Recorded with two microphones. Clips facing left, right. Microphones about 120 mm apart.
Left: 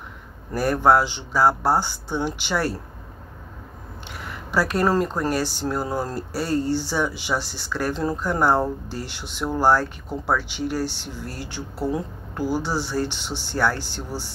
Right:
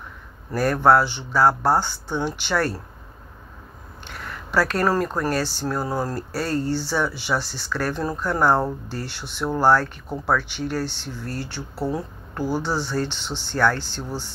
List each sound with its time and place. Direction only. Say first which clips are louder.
0.6 s speech: right 1 dB; 15° left (ahead or behind)
4.1 s speech: right 1 dB; 15° left (ahead or behind)